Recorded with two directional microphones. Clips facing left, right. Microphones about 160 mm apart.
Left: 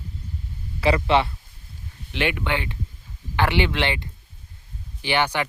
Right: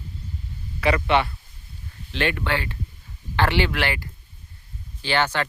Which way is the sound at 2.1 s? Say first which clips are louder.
Even; 15° left (ahead or behind).